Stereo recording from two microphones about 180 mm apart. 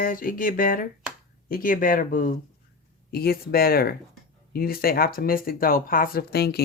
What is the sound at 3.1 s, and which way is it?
Speech, 60° left (ahead or behind).